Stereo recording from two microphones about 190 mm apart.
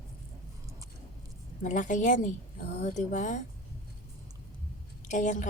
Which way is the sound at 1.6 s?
40° left (ahead or behind).